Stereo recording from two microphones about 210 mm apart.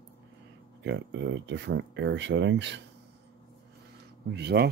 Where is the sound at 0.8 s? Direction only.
60° right (ahead or behind).